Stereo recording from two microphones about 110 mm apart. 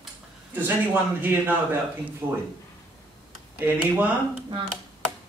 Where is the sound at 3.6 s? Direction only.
15° right (ahead or behind).